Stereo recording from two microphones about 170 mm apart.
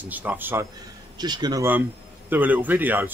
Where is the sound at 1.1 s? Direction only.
25° right (ahead or behind).